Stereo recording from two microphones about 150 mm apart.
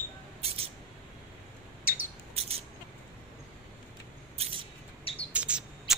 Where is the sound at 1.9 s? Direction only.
75° left (ahead or behind).